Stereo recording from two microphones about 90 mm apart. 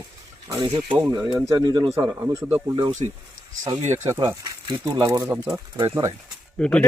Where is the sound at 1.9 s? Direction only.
35° right (ahead or behind).